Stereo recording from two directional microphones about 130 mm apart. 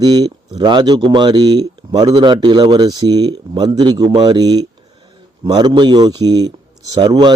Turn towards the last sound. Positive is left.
turn(degrees=-35)  # may be behind; listen again after turning